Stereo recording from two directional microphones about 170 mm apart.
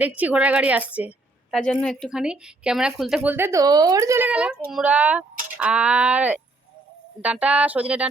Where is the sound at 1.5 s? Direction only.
5° left (ahead or behind); by 4.3 s 20° right (ahead or behind).